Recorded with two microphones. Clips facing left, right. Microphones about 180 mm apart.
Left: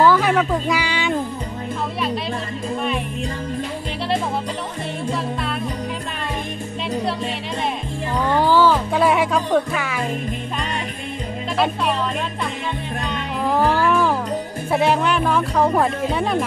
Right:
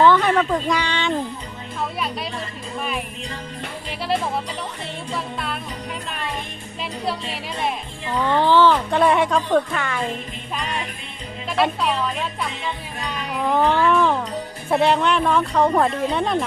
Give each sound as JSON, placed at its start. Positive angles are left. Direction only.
{"t": 0.0, "sound": "speech", "side_deg": 5}
{"t": 5.1, "sound": "music", "side_deg": 0}
{"t": 8.3, "sound": "speech", "side_deg": 10}
{"t": 11.5, "sound": "speech", "side_deg": 0}
{"t": 13.4, "sound": "music", "side_deg": 5}
{"t": 14.7, "sound": "speech", "side_deg": 0}